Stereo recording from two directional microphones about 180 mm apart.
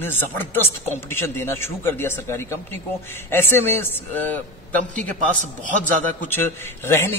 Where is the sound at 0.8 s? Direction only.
15° left (ahead or behind).